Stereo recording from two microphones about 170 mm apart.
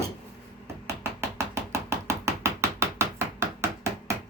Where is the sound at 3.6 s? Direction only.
15° right (ahead or behind).